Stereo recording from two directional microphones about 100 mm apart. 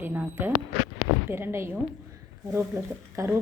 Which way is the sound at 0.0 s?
20° right (ahead or behind).